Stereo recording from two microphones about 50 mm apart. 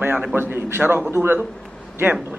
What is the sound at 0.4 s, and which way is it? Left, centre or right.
Speech, right.